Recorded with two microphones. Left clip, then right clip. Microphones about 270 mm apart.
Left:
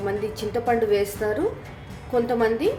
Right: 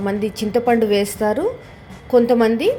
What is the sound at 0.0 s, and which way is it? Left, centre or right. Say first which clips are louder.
A woman's voice: right 4 dB; right.